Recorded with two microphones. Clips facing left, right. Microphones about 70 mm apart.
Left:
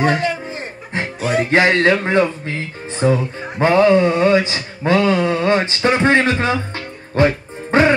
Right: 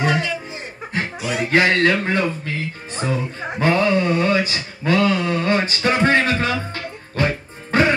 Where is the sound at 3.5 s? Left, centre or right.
Left.